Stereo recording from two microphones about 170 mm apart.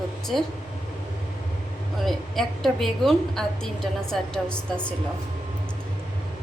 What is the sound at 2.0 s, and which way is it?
A woman's voice, centre (ahead or behind).